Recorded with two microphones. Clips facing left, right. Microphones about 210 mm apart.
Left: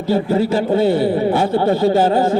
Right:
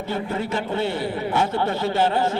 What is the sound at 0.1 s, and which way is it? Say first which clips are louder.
A man's voice: left 11 dB; 35° left (ahead or behind).